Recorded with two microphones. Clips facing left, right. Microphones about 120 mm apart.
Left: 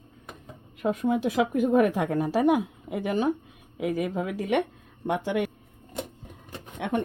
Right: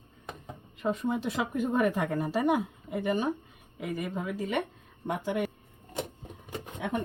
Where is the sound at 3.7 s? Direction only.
90° left.